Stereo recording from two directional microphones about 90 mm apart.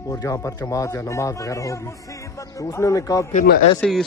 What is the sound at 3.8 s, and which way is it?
Speech, 5° left (ahead or behind).